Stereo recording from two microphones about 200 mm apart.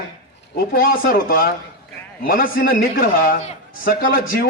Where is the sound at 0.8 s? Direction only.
45° left (ahead or behind).